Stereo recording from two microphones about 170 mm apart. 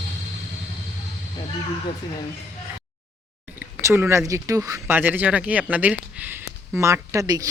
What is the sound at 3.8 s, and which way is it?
Speech, 15° right (ahead or behind).